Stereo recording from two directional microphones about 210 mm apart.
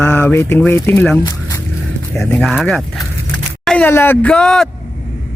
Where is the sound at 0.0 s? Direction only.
10° left (ahead or behind).